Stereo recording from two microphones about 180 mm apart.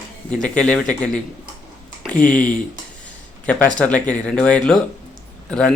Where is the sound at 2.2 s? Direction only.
45° left (ahead or behind).